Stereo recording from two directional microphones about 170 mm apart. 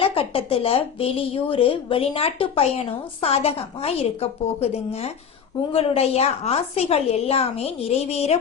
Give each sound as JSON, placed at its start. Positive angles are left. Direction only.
{"t": 0.0, "sound": "speech", "side_deg": 35}